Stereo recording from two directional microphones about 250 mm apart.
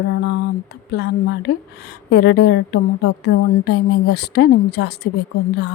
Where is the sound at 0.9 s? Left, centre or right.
Left.